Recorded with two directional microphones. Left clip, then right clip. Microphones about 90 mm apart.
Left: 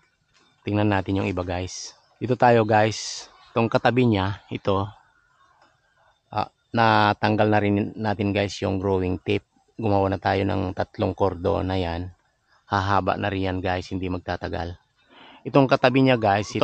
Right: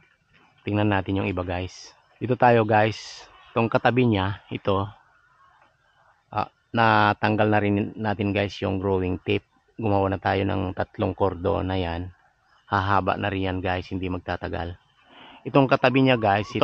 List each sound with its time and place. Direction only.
0.7 s speech: 40° left (ahead or behind)
6.3 s speech: 40° left (ahead or behind)